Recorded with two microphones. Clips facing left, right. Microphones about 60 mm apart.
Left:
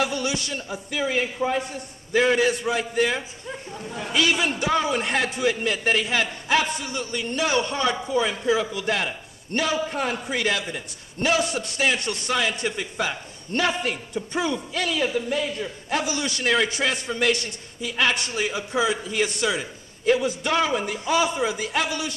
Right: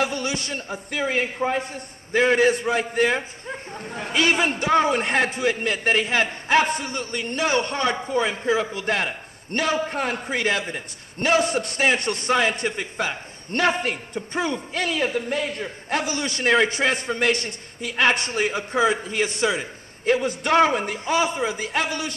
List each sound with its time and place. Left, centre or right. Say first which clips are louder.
0.0 s a man's voice: even; right
19.0 s a man's voice: right 1 dB; right